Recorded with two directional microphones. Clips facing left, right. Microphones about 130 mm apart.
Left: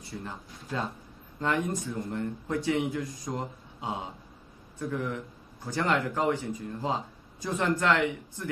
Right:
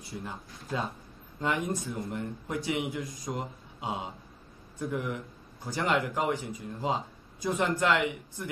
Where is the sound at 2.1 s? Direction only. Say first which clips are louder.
Left 3 dB; 15° right (ahead or behind).